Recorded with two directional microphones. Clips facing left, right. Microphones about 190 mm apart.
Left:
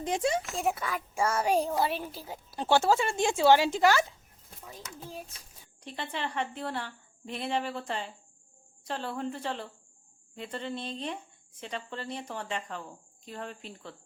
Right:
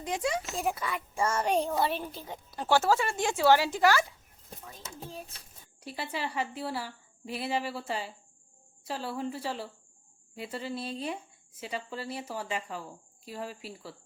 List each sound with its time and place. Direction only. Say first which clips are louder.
0.0 s a woman's voice: left 3 dB; 25° left (ahead or behind)
0.5 s a woman's voice: left 1 dB; centre (ahead or behind)
2.6 s a woman's voice: left 1 dB; 20° left (ahead or behind)
4.8 s speech: right 1 dB; 30° right (ahead or behind)
5.8 s a woman's voice: even; 5° right (ahead or behind)